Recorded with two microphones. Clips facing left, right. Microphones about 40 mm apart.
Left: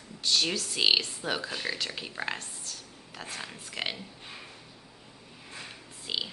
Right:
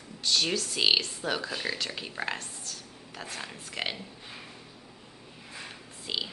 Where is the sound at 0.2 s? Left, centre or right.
Centre.